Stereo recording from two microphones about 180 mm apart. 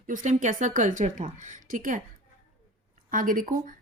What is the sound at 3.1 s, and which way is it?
Speech, 50° right (ahead or behind).